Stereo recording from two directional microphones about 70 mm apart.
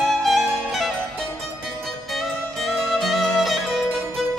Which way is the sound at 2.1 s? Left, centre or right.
Centre.